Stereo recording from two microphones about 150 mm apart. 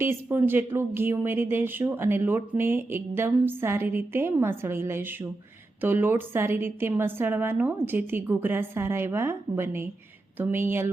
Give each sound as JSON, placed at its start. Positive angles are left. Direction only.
{"t": 0.0, "sound": "speech", "side_deg": -15}